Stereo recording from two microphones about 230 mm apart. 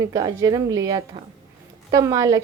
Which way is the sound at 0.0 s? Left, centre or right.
Centre.